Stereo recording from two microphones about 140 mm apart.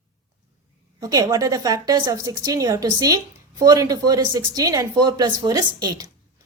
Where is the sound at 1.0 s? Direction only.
25° right (ahead or behind).